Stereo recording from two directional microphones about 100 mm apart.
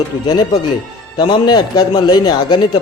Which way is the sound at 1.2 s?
45° left (ahead or behind).